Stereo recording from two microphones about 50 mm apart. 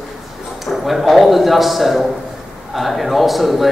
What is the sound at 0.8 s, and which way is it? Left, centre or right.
A man's voice, centre.